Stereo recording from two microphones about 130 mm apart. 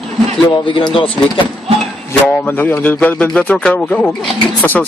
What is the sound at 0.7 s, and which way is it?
Speech, 40° left (ahead or behind).